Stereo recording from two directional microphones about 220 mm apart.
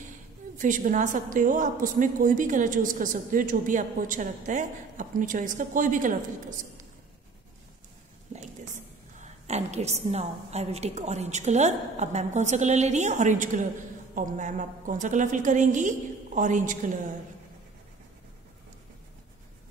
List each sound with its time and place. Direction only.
0.6 s a woman's voice: 35° right (ahead or behind)
8.3 s a woman's voice: 30° right (ahead or behind)